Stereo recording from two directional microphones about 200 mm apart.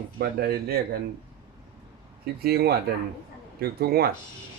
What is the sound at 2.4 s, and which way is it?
A man's voice, 50° right (ahead or behind).